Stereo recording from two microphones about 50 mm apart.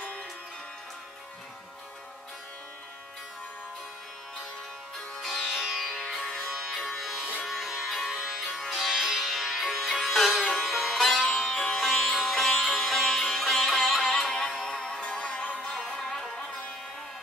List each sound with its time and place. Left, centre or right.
5.5 s music: centre
6.1 s music: centre
6.9 s music: centre
14.6 s music: centre
15.9 s music: centre